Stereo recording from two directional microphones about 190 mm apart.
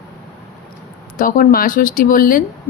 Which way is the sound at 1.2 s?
45° left (ahead or behind).